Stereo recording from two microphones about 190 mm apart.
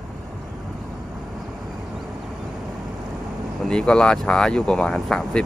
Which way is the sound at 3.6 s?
5° left (ahead or behind).